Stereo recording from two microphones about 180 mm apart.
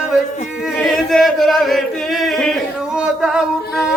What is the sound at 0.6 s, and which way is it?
Chant, centre (ahead or behind).